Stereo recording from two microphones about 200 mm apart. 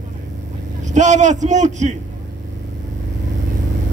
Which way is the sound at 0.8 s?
35° right (ahead or behind).